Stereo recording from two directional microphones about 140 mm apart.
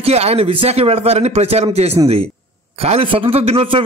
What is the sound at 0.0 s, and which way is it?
A man's voice, 45° right (ahead or behind).